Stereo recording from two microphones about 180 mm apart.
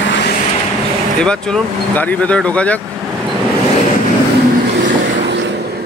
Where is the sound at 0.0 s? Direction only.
90° left.